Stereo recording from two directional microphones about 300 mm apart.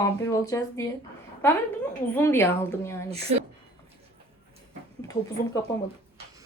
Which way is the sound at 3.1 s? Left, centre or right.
Centre.